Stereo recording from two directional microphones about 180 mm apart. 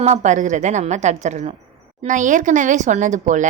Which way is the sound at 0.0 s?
40° right (ahead or behind).